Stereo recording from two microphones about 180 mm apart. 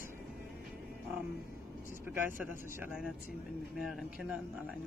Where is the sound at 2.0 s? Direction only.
10° right (ahead or behind).